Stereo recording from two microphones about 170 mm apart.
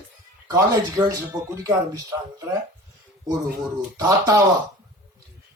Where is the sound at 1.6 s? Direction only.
20° right (ahead or behind).